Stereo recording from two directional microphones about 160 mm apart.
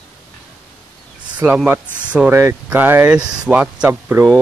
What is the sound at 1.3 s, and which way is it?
Speech, 10° right (ahead or behind).